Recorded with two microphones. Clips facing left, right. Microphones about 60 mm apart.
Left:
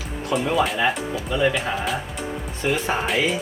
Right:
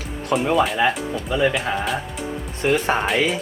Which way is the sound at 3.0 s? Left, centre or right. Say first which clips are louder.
Right 2 dB; centre.